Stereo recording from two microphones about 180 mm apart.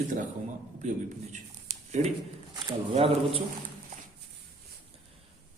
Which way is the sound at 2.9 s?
30° right (ahead or behind).